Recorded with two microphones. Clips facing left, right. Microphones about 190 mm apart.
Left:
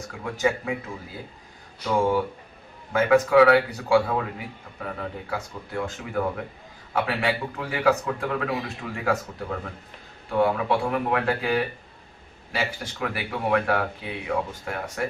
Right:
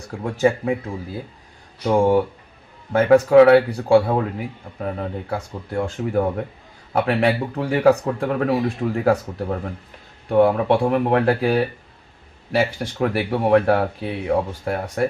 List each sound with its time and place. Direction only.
0.2 s speech: 40° right (ahead or behind)
1.8 s speech: 35° right (ahead or behind)
3.1 s speech: 35° right (ahead or behind)
12.5 s speech: 45° right (ahead or behind)